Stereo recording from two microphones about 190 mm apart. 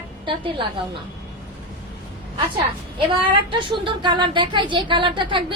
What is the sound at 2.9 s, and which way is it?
A woman's voice, 25° right (ahead or behind).